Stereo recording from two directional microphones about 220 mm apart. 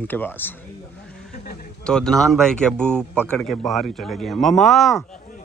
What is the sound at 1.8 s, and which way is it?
Speech, 5° left (ahead or behind).